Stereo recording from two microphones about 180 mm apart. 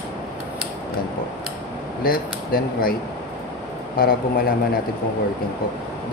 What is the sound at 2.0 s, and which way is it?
Speech, 55° left (ahead or behind).